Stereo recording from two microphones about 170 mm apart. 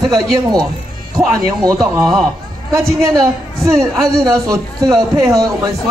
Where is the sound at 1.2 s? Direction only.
20° right (ahead or behind).